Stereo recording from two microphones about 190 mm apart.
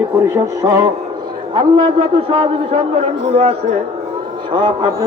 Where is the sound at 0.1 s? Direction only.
15° right (ahead or behind).